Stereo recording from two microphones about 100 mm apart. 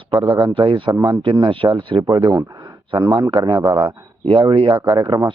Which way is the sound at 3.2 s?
70° right (ahead or behind).